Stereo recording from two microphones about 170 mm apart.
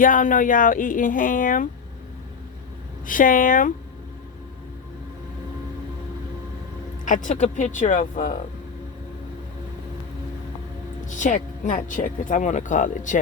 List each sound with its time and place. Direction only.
0.0 s speech: 50° left (ahead or behind)
3.1 s speech: 55° left (ahead or behind)
7.0 s speech: 50° left (ahead or behind)
11.1 s speech: 45° left (ahead or behind)